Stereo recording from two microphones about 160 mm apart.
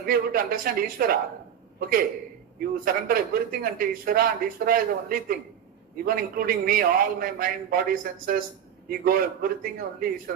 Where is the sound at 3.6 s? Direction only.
65° right (ahead or behind).